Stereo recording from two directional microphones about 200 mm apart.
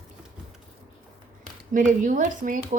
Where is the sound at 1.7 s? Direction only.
40° right (ahead or behind).